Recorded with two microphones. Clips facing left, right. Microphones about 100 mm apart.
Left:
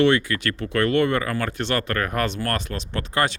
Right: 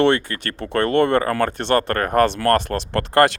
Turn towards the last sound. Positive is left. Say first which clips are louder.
# right 8 dB
turn(degrees=-70)  # may be behind; listen again after turning